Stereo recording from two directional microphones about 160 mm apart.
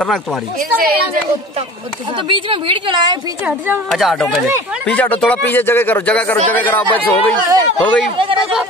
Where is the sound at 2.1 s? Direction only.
30° right (ahead or behind).